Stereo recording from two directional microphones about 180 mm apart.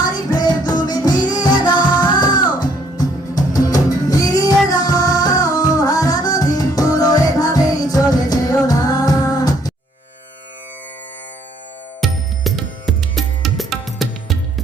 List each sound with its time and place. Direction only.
0.0 s music: 20° left (ahead or behind)
11.9 s music: centre (ahead or behind)